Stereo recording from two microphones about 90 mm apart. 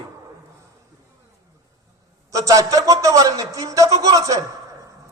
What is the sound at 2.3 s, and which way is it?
A man's voice, 40° right (ahead or behind).